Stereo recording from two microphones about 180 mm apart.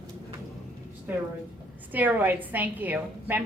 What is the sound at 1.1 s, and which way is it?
A woman's voice, 10° right (ahead or behind).